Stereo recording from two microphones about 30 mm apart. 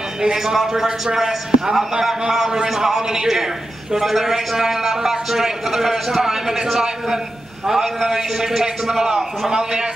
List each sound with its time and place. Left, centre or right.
0.2 s a man's voice: right